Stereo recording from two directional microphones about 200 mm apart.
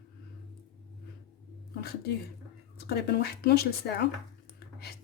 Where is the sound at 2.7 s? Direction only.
55° left (ahead or behind).